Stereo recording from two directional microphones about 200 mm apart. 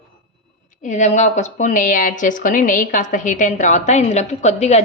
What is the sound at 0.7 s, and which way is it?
A woman's voice, 40° left (ahead or behind).